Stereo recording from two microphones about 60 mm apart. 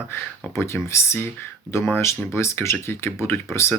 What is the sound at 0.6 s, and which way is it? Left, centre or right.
Speech, left.